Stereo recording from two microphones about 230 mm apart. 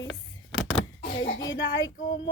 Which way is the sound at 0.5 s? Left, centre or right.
Centre.